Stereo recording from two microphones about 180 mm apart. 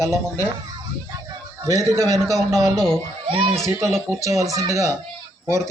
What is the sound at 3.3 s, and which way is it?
Speech, 30° right (ahead or behind).